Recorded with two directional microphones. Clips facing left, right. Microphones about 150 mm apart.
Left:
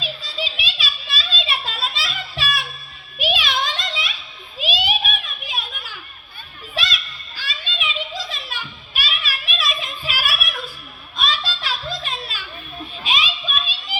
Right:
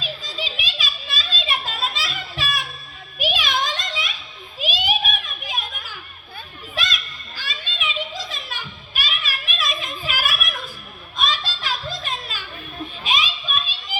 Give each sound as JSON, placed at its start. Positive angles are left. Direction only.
{"t": 0.0, "sound": "children playing", "side_deg": -45}
{"t": 3.2, "sound": "a sound", "side_deg": -45}
{"t": 4.6, "sound": "children playing", "side_deg": -45}